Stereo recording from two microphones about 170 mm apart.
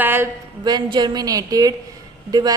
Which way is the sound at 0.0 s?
10° right (ahead or behind).